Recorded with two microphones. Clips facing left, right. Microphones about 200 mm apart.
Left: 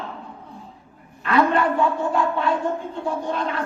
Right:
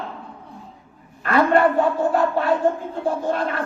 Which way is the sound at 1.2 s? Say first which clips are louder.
Right 2 dB; 50° right (ahead or behind).